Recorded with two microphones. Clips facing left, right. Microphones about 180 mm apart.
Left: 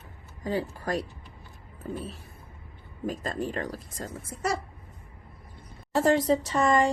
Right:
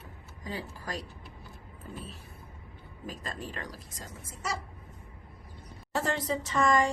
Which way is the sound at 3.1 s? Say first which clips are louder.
Left 8 dB; 50° left (ahead or behind).